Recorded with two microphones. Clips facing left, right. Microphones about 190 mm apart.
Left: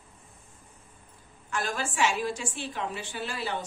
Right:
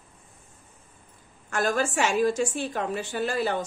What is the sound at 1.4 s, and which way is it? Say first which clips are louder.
A woman's voice: right 7 dB; 45° right (ahead or behind).